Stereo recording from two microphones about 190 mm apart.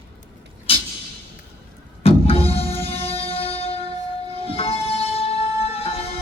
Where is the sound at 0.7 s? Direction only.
30° left (ahead or behind).